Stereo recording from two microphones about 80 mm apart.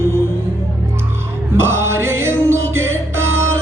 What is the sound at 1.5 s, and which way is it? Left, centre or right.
Music, right.